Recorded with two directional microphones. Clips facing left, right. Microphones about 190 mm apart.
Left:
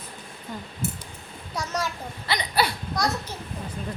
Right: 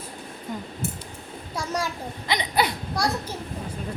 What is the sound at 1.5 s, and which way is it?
A child's voice, 10° right (ahead or behind).